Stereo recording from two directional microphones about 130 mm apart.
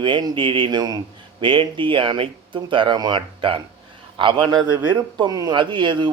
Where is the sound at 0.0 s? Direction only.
35° right (ahead or behind).